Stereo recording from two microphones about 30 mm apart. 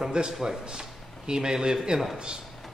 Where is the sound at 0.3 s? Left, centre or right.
Centre.